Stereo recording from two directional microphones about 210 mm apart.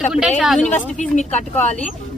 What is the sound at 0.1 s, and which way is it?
Speech, 5° right (ahead or behind).